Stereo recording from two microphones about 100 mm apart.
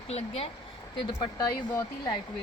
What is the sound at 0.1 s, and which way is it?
Speech, 90° left.